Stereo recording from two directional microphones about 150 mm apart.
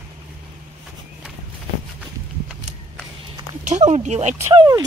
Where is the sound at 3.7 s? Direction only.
50° right (ahead or behind).